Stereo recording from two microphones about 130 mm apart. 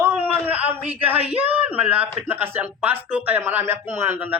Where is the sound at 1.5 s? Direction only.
10° right (ahead or behind).